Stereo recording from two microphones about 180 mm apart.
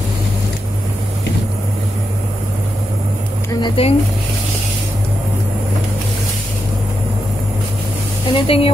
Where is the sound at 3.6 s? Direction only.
30° left (ahead or behind).